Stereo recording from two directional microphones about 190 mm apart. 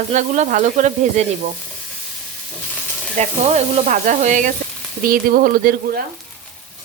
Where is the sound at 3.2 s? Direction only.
35° right (ahead or behind); by 6.0 s 50° right (ahead or behind).